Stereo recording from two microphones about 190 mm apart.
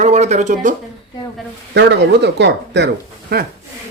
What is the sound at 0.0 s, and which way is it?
Speech, 35° right (ahead or behind).